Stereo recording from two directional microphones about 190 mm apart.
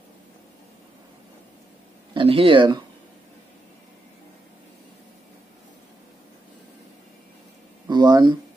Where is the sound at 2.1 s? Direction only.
30° right (ahead or behind).